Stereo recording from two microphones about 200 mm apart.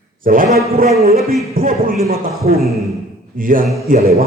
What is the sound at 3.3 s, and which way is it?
Speech, 45° right (ahead or behind).